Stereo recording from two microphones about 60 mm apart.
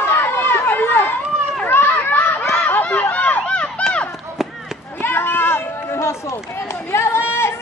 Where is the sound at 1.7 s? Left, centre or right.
Left.